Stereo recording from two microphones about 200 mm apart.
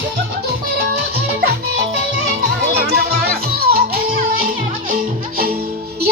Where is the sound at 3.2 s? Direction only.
50° right (ahead or behind).